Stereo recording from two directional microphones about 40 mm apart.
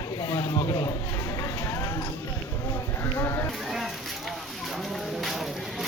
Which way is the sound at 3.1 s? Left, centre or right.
Left.